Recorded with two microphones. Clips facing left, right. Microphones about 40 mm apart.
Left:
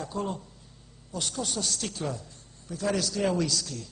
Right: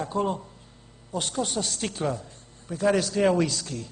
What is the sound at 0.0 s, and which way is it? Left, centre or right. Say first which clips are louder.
A woman's voice: right 6 dB; right.